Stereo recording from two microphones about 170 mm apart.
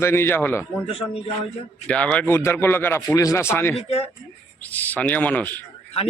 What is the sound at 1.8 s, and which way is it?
A man's voice, 5° left (ahead or behind).